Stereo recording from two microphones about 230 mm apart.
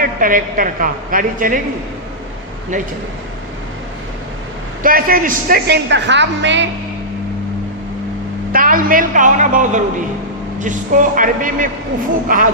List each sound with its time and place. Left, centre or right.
0.0 s a woman's voice: right
4.8 s a woman's voice: right
8.5 s a woman's voice: right